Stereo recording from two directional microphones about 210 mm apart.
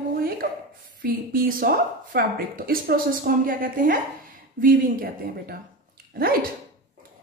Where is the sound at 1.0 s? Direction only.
45° right (ahead or behind).